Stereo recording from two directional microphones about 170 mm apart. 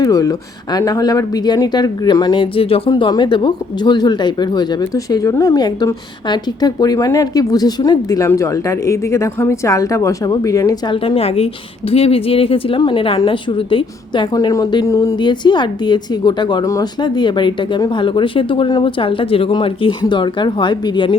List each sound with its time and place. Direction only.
0.0 s speech: 20° left (ahead or behind)